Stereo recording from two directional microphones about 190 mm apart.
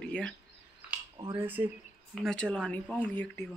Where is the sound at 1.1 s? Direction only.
25° right (ahead or behind).